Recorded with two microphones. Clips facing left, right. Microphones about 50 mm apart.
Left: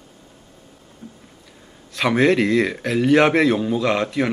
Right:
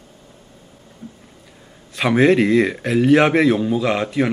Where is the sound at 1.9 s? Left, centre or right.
Centre.